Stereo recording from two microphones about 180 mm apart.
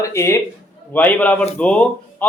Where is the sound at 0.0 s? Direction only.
15° left (ahead or behind).